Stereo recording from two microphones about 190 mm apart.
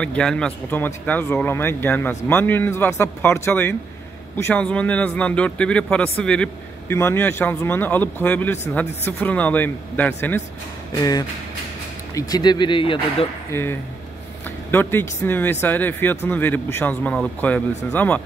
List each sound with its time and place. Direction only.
0.0 s speech: 5° left (ahead or behind); by 13.3 s 25° left (ahead or behind)
13.5 s speech: 10° left (ahead or behind)